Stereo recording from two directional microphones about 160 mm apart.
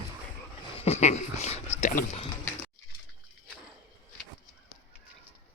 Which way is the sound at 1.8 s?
50° left (ahead or behind).